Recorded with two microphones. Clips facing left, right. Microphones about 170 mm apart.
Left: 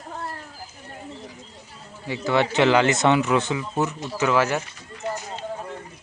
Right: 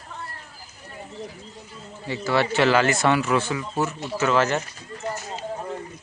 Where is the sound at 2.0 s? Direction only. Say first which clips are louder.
Left 1 dB; 15° left (ahead or behind).